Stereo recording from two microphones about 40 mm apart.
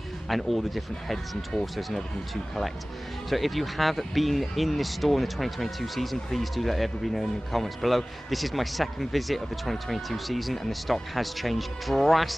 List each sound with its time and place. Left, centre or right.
0.3 s speech: centre
3.3 s speech: centre